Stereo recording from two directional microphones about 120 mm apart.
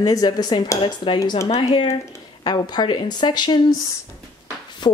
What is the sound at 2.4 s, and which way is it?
Speech, 35° left (ahead or behind).